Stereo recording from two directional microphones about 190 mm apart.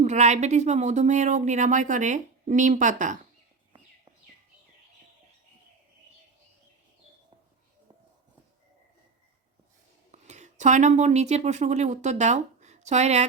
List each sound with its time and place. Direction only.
0.0 s speech: 40° right (ahead or behind)
10.1 s speech: 40° right (ahead or behind)